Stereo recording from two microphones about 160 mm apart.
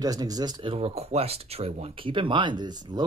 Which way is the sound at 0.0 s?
25° right (ahead or behind).